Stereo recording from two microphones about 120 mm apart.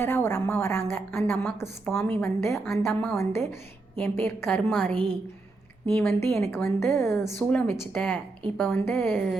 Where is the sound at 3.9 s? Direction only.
20° left (ahead or behind).